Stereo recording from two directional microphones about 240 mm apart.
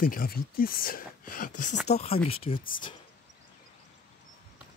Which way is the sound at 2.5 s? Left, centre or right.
Left.